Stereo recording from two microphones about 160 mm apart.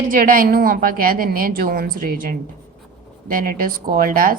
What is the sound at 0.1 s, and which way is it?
A woman's voice, 60° right (ahead or behind).